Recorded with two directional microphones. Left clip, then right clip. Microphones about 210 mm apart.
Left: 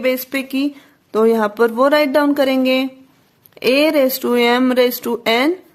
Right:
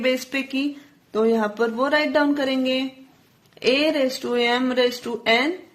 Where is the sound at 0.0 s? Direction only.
30° left (ahead or behind).